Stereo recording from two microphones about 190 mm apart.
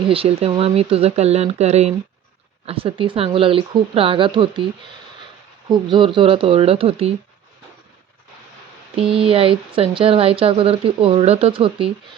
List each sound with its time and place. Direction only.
0.1 s speech: 30° right (ahead or behind)
5.9 s speech: 25° right (ahead or behind)
9.0 s speech: 30° right (ahead or behind)